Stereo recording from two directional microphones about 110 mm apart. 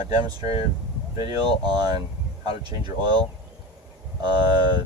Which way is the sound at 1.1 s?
40° right (ahead or behind).